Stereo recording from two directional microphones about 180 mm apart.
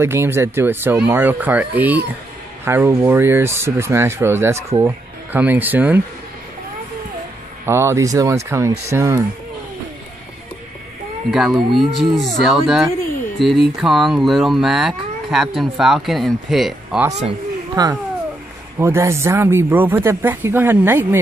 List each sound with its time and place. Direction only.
0.0 s speech: 15° right (ahead or behind)
7.6 s speech: 15° right (ahead or behind)
11.2 s speech: centre (ahead or behind)
17.1 s speech: 40° right (ahead or behind)
17.8 s speech: 20° right (ahead or behind)